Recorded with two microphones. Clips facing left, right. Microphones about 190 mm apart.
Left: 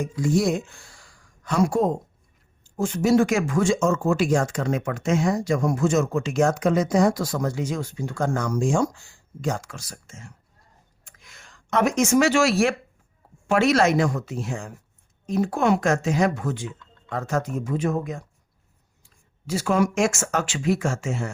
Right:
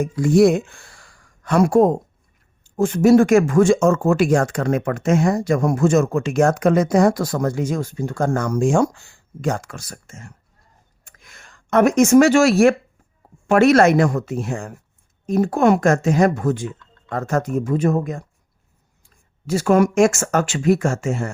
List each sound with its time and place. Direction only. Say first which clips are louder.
0.0 s speech: right 8 dB; 60° right (ahead or behind)
11.0 s a sound: right 3 dB; 50° right (ahead or behind)
13.5 s speech: right 6 dB; 55° right (ahead or behind)
19.5 s speech: right 6 dB; 50° right (ahead or behind)